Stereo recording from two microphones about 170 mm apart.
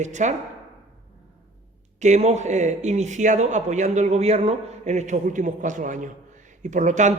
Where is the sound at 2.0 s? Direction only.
40° right (ahead or behind).